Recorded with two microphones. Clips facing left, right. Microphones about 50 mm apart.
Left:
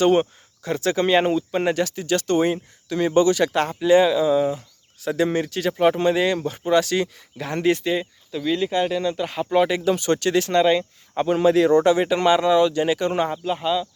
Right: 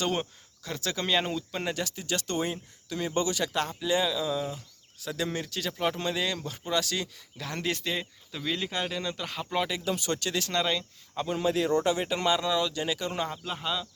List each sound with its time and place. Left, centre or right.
0.0 s speech: left
1.7 s speech: left
7.8 s speech: centre
9.6 s speech: left
10.5 s speech: left
11.1 s speech: left
12.4 s speech: left
13.4 s speech: centre